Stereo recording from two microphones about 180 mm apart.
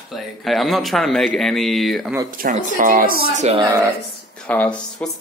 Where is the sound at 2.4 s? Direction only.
45° right (ahead or behind).